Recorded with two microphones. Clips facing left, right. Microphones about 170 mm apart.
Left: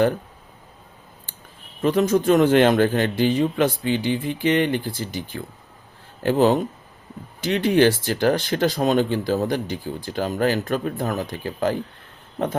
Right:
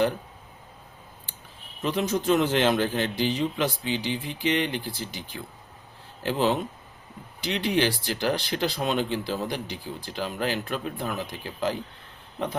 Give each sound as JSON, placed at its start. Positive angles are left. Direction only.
{"t": 1.8, "sound": "speech", "side_deg": 50}